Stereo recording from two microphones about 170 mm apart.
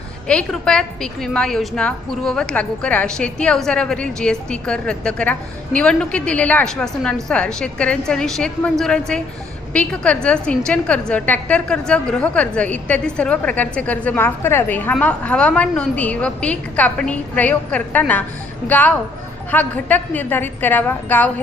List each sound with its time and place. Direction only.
0.3 s a woman's voice: 5° left (ahead or behind)